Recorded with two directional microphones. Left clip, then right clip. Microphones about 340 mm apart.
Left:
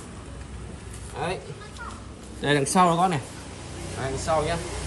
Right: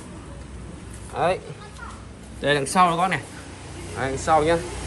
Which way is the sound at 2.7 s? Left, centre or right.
Centre.